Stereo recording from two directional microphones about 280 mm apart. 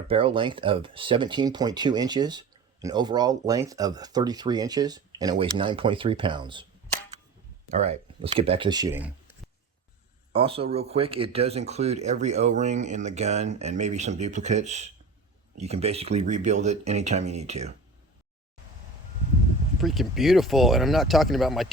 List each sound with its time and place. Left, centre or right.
0.1 s speech: centre
7.7 s speech: right; by 9.1 s centre
10.3 s speech: centre
19.8 s speech: centre